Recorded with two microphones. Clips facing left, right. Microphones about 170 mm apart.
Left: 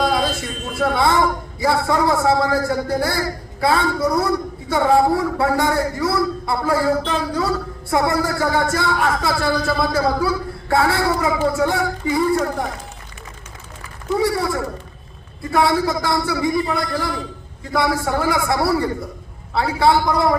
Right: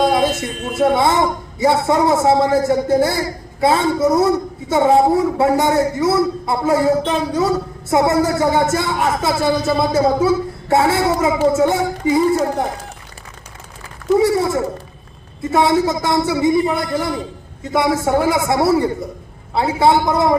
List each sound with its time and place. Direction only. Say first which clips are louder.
0.0 s a man's voice: right 4 dB; 20° right (ahead or behind)
14.2 s a man's voice: right 3 dB; 25° right (ahead or behind)